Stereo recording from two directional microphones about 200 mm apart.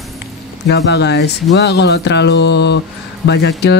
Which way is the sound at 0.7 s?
60° left (ahead or behind).